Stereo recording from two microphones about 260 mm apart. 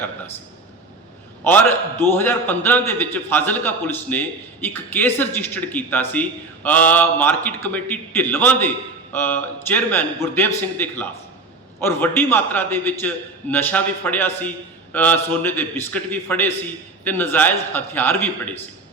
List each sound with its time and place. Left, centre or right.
1.5 s a man's voice: centre